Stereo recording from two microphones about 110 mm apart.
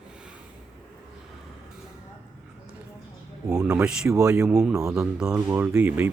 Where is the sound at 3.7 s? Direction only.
10° right (ahead or behind).